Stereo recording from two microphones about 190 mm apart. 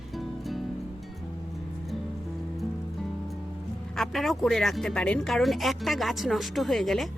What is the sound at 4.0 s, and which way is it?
Speech, centre (ahead or behind).